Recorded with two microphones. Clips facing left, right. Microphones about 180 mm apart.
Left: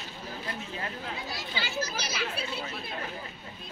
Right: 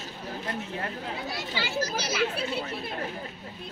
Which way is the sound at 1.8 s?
55° right (ahead or behind).